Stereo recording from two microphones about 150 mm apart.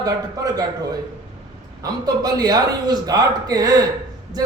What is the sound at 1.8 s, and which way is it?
A man's voice, 25° right (ahead or behind).